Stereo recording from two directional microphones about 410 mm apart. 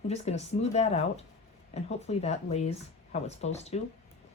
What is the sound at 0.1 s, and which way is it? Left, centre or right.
Speech, centre.